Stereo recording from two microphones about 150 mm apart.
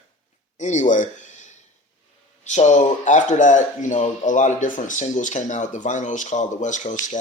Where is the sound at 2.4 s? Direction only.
50° left (ahead or behind).